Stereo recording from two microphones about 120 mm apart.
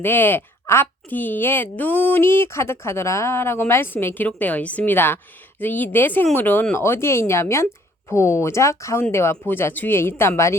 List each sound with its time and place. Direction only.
0.0 s a woman's voice: 15° left (ahead or behind)